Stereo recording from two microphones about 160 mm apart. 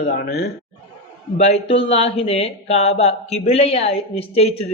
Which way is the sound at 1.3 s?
40° left (ahead or behind).